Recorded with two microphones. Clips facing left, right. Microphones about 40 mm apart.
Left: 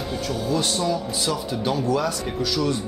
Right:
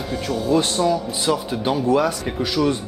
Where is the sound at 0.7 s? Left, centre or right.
Centre.